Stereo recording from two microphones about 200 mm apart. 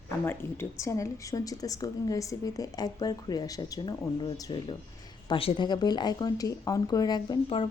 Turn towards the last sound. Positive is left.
turn(degrees=25)  # may be behind; listen again after turning